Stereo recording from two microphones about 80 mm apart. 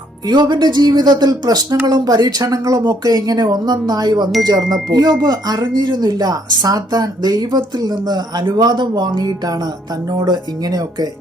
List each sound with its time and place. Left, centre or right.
0.3 s speech: right